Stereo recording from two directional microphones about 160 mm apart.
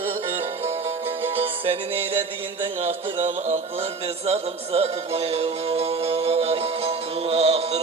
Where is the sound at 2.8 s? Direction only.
35° right (ahead or behind).